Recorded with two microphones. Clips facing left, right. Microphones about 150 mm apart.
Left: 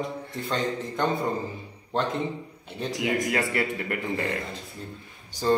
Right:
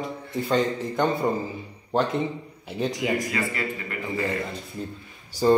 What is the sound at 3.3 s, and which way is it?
Speech, 65° left (ahead or behind).